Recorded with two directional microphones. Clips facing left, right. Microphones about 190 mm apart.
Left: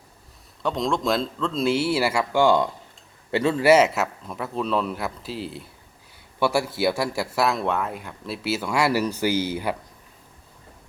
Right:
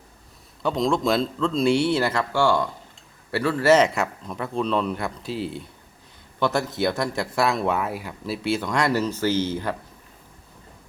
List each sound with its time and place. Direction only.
0.6 s a man's voice: centre (ahead or behind)